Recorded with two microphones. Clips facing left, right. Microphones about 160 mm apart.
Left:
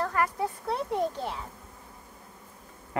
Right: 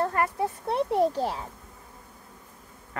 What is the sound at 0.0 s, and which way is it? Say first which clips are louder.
A child's voice: right 2 dB; 25° right (ahead or behind).